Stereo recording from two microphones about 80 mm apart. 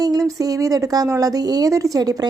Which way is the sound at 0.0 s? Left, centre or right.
Right.